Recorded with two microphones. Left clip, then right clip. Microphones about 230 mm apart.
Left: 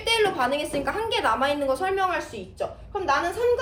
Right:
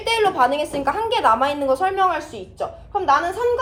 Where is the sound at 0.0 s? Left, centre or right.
Centre.